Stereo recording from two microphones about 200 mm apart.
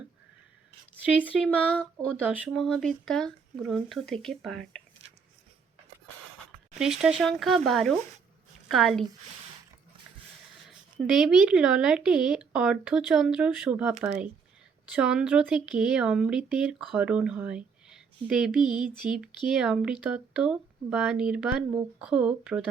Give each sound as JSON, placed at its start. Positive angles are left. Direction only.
{"t": 1.2, "sound": "speech", "side_deg": 5}
{"t": 6.7, "sound": "a woman's voice", "side_deg": -5}
{"t": 11.0, "sound": "speech", "side_deg": -5}
{"t": 14.9, "sound": "speech", "side_deg": -5}